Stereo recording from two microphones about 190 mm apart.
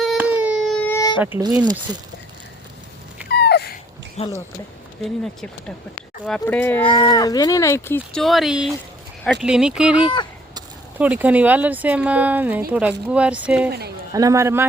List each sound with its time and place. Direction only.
0.0 s baby cry: 5° right (ahead or behind)
0.9 s a sound: 20° left (ahead or behind)
1.4 s speech: 20° right (ahead or behind)
3.2 s a sound: 60° left (ahead or behind)
4.2 s speech: 35° left (ahead or behind)
5.0 s speech: centre (ahead or behind)
6.8 s speech: 20° left (ahead or behind); by 13.7 s 5° right (ahead or behind)
13.7 s speech: 55° right (ahead or behind)
14.1 s speech: 15° right (ahead or behind)